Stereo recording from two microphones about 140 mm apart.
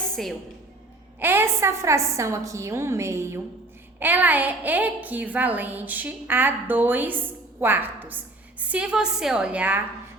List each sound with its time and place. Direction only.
0.2 s a woman's voice: centre (ahead or behind)
1.2 s a woman's voice: 15° right (ahead or behind)